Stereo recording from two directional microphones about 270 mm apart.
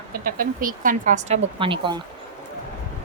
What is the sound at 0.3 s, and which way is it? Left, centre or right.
Speech, right.